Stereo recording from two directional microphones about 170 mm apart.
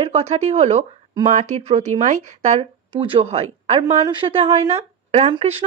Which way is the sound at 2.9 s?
30° right (ahead or behind).